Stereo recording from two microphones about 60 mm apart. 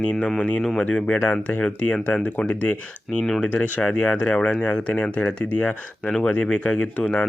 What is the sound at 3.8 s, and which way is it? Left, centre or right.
Speech, centre.